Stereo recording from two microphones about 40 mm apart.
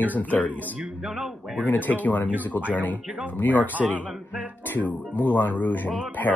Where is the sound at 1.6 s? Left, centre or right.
Left.